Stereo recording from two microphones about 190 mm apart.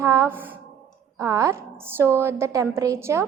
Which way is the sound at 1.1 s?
15° right (ahead or behind).